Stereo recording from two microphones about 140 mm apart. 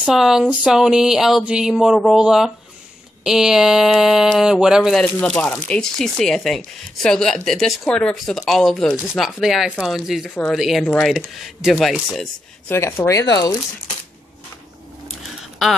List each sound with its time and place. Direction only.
0.0 s speech: 5° right (ahead or behind)
5.0 s speech: 10° left (ahead or behind)
12.6 s speech: 20° left (ahead or behind)